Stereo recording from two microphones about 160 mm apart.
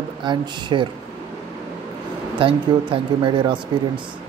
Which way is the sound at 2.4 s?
30° right (ahead or behind).